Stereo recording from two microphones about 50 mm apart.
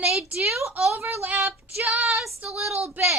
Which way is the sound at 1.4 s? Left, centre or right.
Right.